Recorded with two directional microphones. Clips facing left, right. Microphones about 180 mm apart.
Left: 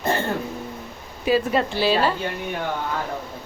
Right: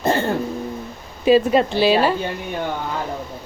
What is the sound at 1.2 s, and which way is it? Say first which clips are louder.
Speech: right 6 dB; 20° right (ahead or behind).